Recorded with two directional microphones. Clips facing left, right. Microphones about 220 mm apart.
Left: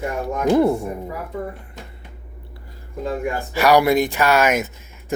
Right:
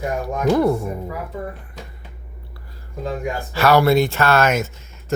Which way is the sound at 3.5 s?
15° left (ahead or behind).